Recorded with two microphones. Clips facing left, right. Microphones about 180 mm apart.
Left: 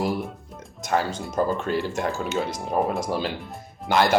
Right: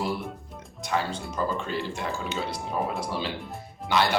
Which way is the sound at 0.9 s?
45° left (ahead or behind).